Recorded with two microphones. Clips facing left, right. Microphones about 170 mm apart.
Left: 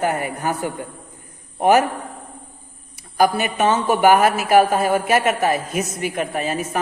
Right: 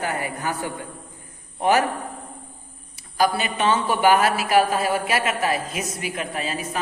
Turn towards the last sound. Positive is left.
turn(degrees=50)  # may be behind; listen again after turning